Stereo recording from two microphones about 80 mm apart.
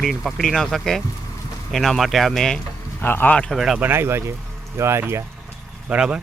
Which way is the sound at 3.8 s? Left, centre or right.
Right.